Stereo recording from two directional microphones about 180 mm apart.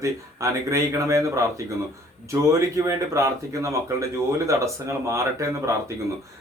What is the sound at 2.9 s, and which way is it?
Speech, 15° right (ahead or behind).